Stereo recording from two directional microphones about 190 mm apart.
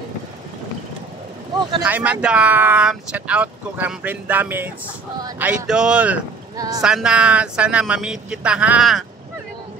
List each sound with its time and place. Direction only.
1.8 s speech: 10° right (ahead or behind)
6.5 s speech: 20° right (ahead or behind)
6.8 s a woman's voice: 5° right (ahead or behind)